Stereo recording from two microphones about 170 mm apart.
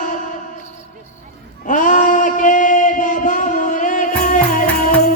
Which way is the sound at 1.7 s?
50° left (ahead or behind).